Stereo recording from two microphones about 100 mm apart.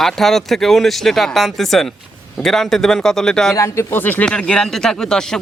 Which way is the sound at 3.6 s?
30° left (ahead or behind).